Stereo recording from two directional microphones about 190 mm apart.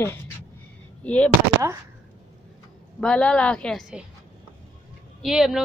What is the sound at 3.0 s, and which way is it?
A woman's voice, 5° left (ahead or behind).